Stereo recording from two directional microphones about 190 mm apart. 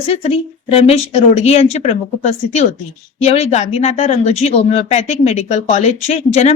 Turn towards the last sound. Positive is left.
turn(degrees=35)  # may be behind; listen again after turning